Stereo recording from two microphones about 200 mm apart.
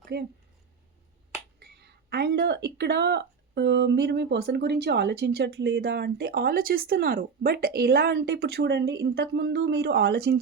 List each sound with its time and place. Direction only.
0.0 s speech: 50° right (ahead or behind)
1.8 s speech: 55° right (ahead or behind)